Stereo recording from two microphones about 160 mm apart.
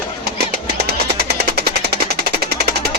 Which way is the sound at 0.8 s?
75° right (ahead or behind).